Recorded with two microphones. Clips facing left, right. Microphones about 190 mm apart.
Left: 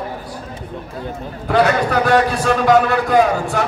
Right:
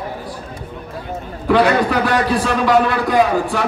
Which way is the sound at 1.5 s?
45° left (ahead or behind).